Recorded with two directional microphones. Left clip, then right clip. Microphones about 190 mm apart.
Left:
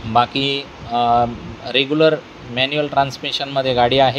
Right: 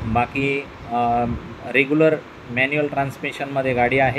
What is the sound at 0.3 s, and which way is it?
Speech, 10° right (ahead or behind).